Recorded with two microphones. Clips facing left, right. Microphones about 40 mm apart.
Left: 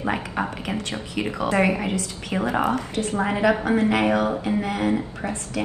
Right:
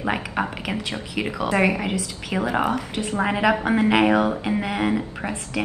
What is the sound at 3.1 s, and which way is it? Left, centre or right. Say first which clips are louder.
A woman's voice: right 1 dB; right.